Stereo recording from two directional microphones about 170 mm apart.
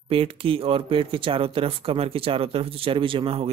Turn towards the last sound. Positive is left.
turn(degrees=-35)  # may be behind; listen again after turning